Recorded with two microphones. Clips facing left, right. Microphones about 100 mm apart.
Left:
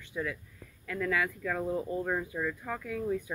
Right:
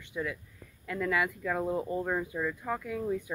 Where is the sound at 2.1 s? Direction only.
5° right (ahead or behind).